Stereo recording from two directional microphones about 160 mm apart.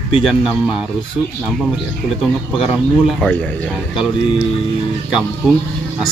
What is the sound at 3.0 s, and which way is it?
Speech, centre (ahead or behind).